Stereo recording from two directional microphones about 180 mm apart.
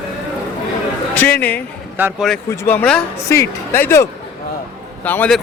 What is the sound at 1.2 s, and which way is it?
Speech, 10° left (ahead or behind).